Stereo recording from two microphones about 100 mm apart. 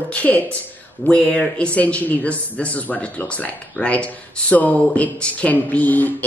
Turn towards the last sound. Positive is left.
turn(degrees=15)  # may be behind; listen again after turning